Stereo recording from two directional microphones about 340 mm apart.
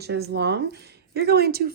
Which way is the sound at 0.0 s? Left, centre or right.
Right.